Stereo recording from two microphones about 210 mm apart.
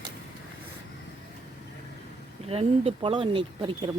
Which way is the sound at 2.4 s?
30° right (ahead or behind).